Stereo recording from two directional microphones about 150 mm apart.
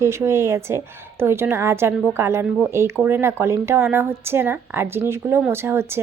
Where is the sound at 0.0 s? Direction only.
20° right (ahead or behind).